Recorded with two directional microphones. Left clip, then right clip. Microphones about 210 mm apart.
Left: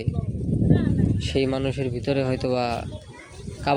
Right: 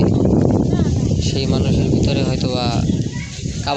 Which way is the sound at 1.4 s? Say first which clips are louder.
Right 2 dB; 20° left (ahead or behind).